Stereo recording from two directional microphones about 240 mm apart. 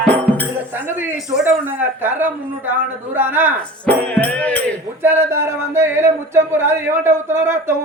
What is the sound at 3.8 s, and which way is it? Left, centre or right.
Music, centre.